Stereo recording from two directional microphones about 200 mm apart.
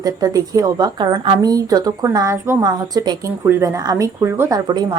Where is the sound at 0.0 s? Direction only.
15° right (ahead or behind).